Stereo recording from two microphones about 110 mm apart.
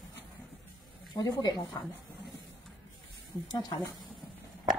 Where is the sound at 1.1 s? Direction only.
35° left (ahead or behind).